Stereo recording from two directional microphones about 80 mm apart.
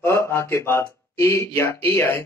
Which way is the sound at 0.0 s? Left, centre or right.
Left.